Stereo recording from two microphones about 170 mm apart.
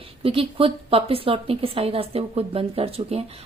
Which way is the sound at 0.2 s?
30° right (ahead or behind).